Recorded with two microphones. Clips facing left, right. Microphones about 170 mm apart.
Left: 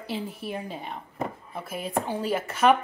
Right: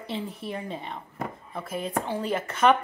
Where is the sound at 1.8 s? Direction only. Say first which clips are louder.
Left 2 dB; 10° left (ahead or behind).